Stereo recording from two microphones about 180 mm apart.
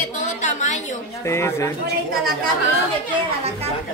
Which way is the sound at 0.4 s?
40° left (ahead or behind).